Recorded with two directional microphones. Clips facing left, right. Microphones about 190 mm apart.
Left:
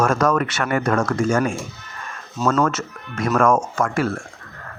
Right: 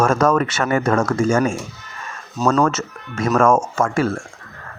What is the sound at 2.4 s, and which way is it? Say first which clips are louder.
Speech: right 2 dB; 35° right (ahead or behind).